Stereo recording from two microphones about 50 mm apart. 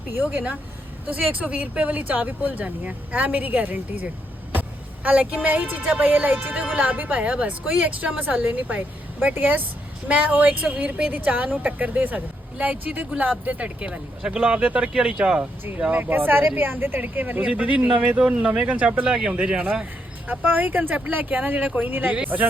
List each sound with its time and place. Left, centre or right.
0.2 s speech: right
13.4 s speech: right
16.0 s speech: right
17.4 s speech: right
17.9 s speech: right
19.0 s speech: centre
20.2 s speech: right
22.3 s speech: right